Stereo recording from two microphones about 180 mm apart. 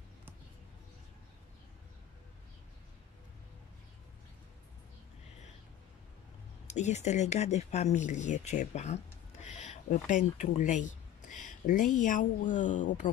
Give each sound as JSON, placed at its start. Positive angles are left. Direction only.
{"t": 6.7, "sound": "speech", "side_deg": 40}